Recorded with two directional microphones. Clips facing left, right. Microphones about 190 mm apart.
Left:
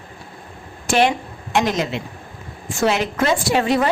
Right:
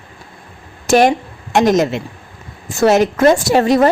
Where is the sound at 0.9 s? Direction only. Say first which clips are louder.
Right 6 dB; 45° right (ahead or behind).